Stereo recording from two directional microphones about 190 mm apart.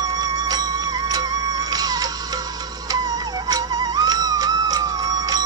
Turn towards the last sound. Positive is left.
turn(degrees=-20)  # may be behind; listen again after turning